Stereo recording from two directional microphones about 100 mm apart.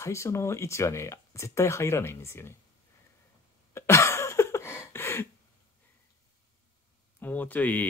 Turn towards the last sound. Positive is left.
turn(degrees=15)  # may be behind; listen again after turning